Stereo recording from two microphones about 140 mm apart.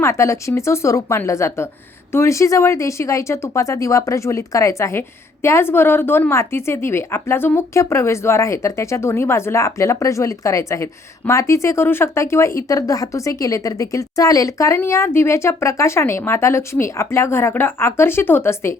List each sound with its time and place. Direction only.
0.0 s a woman's voice: 20° left (ahead or behind)